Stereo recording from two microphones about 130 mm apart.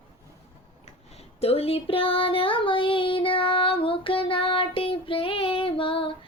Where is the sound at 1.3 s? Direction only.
50° left (ahead or behind).